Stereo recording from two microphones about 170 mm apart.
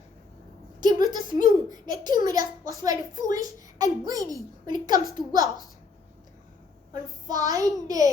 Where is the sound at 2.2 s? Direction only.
20° right (ahead or behind).